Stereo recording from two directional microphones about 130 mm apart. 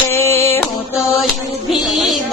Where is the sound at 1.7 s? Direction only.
Centre (ahead or behind).